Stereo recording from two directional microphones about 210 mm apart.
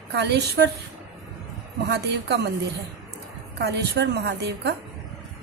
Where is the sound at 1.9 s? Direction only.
50° right (ahead or behind).